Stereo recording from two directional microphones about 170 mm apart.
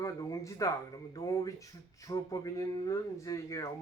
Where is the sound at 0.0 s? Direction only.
20° left (ahead or behind).